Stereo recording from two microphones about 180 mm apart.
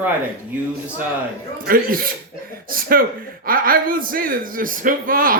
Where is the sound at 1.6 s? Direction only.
55° right (ahead or behind).